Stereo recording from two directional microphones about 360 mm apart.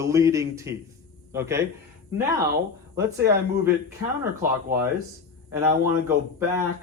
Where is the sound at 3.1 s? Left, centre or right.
Right.